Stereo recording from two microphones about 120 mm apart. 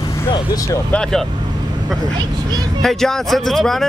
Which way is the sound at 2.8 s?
5° left (ahead or behind).